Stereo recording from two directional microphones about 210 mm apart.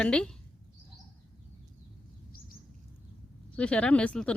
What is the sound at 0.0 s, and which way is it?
Speech, 5° left (ahead or behind).